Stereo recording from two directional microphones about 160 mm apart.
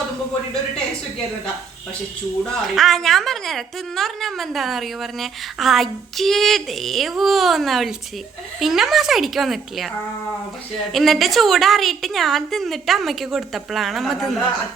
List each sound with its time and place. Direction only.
2.4 s a woman's voice: centre (ahead or behind)
10.9 s a woman's voice: centre (ahead or behind)